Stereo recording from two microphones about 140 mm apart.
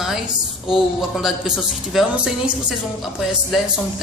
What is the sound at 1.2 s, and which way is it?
A woman's voice, centre (ahead or behind).